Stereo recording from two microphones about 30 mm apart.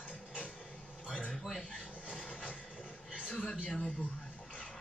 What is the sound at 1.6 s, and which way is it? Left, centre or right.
Speech, left.